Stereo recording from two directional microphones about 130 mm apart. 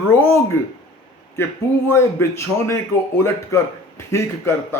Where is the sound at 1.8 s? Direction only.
20° left (ahead or behind).